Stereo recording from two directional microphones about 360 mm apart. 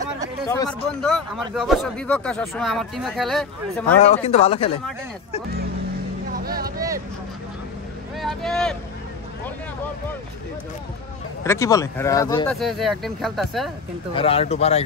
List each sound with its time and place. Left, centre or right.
0.5 s speech: centre
4.0 s speech: centre
6.4 s vehicle: right
8.2 s speech: centre
11.4 s speech: centre
14.1 s speech: centre